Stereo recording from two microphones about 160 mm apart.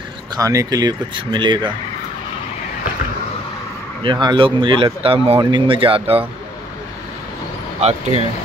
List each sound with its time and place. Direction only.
0.4 s speech: 20° right (ahead or behind)
4.0 s speech: 30° right (ahead or behind)